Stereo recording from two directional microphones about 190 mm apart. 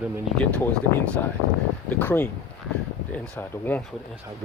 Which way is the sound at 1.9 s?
10° left (ahead or behind).